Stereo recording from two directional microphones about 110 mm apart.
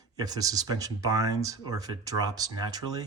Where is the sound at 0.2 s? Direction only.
35° right (ahead or behind).